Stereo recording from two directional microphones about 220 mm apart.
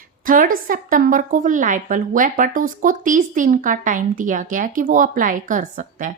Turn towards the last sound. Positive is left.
turn(degrees=-35)  # may be behind; listen again after turning